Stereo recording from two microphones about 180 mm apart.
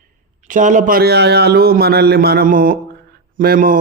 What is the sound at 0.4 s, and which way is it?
A man's voice, 45° right (ahead or behind).